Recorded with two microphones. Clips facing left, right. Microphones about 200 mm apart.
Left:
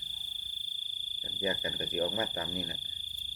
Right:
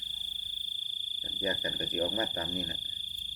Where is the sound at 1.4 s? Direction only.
10° left (ahead or behind).